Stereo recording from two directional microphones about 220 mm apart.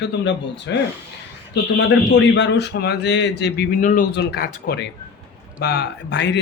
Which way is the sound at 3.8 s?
40° left (ahead or behind).